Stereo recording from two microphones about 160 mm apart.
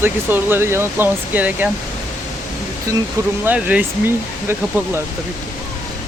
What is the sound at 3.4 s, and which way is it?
Speech, 10° right (ahead or behind).